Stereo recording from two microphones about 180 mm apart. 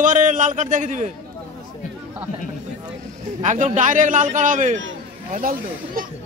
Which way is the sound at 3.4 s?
40° right (ahead or behind).